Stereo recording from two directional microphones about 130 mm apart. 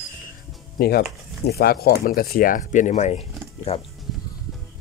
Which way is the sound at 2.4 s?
85° left.